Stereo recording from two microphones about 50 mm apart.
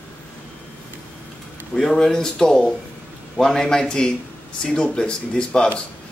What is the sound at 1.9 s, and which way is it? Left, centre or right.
Speech, centre.